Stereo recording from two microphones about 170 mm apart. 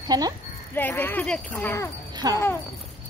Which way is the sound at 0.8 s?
10° left (ahead or behind).